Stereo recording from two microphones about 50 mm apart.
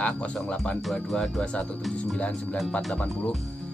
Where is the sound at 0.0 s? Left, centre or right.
Centre.